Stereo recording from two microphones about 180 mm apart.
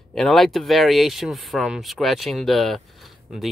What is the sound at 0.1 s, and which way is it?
Speech, centre (ahead or behind).